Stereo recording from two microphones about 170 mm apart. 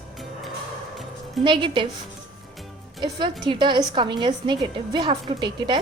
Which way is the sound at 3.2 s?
25° right (ahead or behind).